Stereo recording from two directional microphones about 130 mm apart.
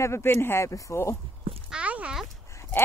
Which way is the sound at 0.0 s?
20° left (ahead or behind).